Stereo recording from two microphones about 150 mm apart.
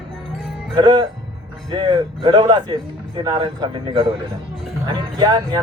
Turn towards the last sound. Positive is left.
turn(degrees=-30)  # may be behind; listen again after turning